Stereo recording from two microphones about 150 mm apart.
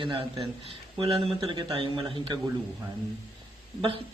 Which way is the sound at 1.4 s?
25° right (ahead or behind).